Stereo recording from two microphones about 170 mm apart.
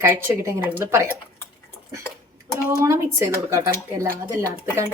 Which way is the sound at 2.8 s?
15° right (ahead or behind).